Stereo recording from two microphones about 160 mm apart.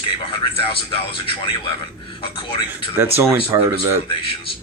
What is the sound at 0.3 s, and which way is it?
A man's voice, 35° left (ahead or behind).